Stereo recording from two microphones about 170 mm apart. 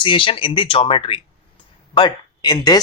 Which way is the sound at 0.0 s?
30° left (ahead or behind).